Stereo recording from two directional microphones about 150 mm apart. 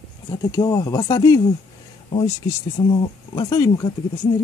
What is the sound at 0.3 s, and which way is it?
Speech, 25° left (ahead or behind).